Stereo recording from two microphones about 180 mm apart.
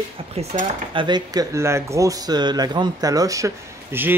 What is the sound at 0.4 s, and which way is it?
Speech, 35° right (ahead or behind).